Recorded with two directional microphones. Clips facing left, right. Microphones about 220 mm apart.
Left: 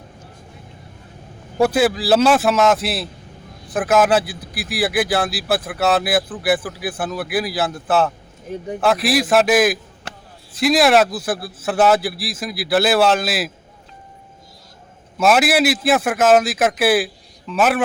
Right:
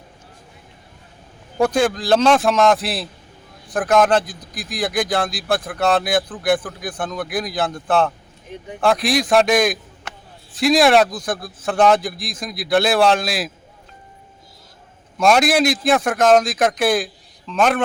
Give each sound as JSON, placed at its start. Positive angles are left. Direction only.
{"t": 1.5, "sound": "a man's voice", "side_deg": 5}
{"t": 10.1, "sound": "a sound", "side_deg": 35}
{"t": 10.5, "sound": "a man's voice", "side_deg": 0}
{"t": 15.2, "sound": "a man's voice", "side_deg": 5}